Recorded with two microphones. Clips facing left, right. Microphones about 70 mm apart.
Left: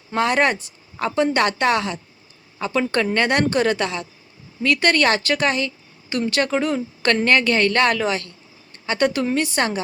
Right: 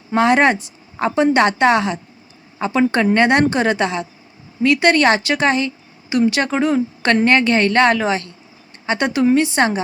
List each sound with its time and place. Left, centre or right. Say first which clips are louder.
0.1 s speech: right 5 dB; right